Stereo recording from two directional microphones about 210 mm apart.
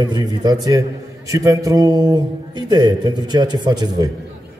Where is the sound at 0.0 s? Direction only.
20° right (ahead or behind).